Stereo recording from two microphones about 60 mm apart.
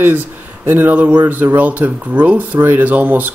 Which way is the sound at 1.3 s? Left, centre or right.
Right.